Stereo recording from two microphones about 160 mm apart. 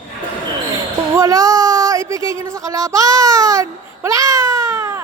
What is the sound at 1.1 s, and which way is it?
Speech, 20° right (ahead or behind).